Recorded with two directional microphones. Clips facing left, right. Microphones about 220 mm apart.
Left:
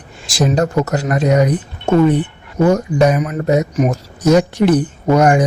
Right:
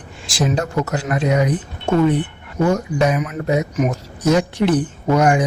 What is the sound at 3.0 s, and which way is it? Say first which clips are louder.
Speech: left 4 dB; 40° left (ahead or behind).